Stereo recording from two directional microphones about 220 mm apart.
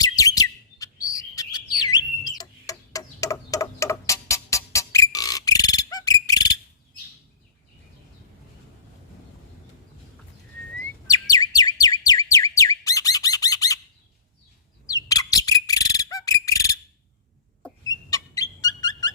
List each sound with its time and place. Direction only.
0.0 s chirp: 15° left (ahead or behind)
2.2 s tick-tock: 15° left (ahead or behind)
11.0 s bird: 15° left (ahead or behind)
15.0 s bird: 15° left (ahead or behind)
17.8 s a sound: 15° left (ahead or behind)